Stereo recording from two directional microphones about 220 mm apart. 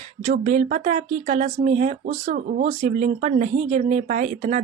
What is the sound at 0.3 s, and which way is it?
A woman's voice, 35° right (ahead or behind).